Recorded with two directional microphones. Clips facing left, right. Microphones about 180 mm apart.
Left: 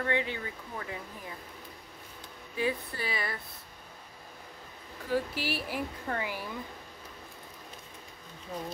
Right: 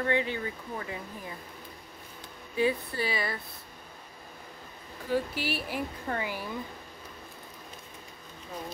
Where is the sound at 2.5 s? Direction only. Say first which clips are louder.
Right 4 dB; 30° right (ahead or behind).